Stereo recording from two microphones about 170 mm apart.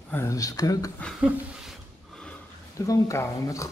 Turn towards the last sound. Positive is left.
turn(degrees=20)  # may be behind; listen again after turning